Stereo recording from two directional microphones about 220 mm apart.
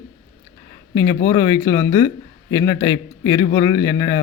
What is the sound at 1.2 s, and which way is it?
Speech, 20° left (ahead or behind).